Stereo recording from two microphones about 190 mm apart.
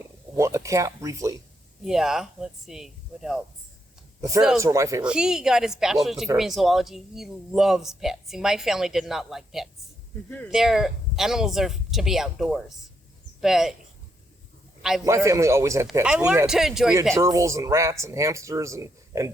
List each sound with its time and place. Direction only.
0.3 s speech: 15° right (ahead or behind)
1.8 s speech: centre (ahead or behind)
4.6 s speech: 15° right (ahead or behind)
5.0 s speech: 5° right (ahead or behind)
10.2 s speech: 10° left (ahead or behind)
10.5 s speech: centre (ahead or behind)
14.8 s a man's voice: centre (ahead or behind)
15.0 s speech: 15° right (ahead or behind)
17.2 s speech: 15° right (ahead or behind)